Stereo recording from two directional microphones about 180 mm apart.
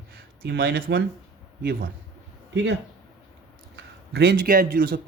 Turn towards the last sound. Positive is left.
turn(degrees=-55)  # may be behind; listen again after turning